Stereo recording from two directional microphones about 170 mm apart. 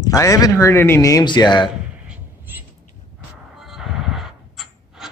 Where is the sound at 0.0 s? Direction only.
20° left (ahead or behind).